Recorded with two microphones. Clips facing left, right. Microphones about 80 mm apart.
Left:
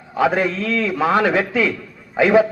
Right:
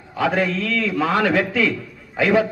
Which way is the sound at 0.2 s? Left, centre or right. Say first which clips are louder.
Left 2 dB; left.